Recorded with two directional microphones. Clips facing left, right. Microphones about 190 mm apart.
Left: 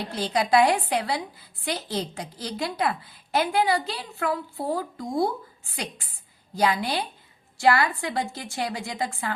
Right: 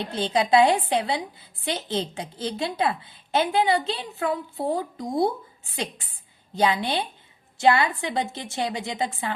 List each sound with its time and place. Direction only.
0.0 s a woman's voice: 25° right (ahead or behind)